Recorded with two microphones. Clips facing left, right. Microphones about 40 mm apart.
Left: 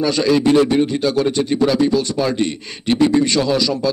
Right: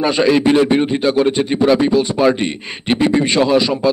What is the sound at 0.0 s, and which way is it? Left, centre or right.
Speech, right.